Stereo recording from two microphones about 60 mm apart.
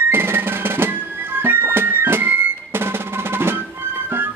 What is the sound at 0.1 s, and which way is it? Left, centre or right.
Music, right.